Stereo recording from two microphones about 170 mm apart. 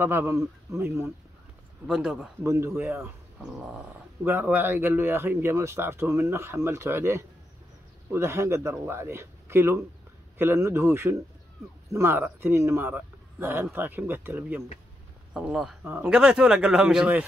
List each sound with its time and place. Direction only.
0.0 s speech: 15° right (ahead or behind)
1.9 s speech: 5° right (ahead or behind)
2.4 s speech: 15° right (ahead or behind)